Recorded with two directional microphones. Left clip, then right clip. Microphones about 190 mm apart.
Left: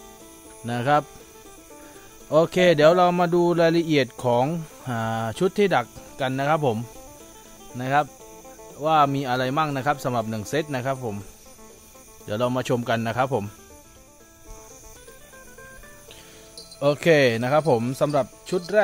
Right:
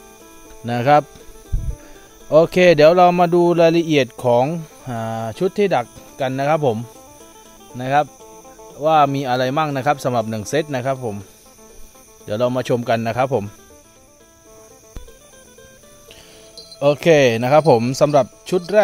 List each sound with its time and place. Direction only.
0.7 s speech: 30° right (ahead or behind)
2.2 s speech: 20° right (ahead or behind)
12.3 s speech: 20° right (ahead or behind)
16.5 s speech: 20° right (ahead or behind); by 18.6 s 45° right (ahead or behind)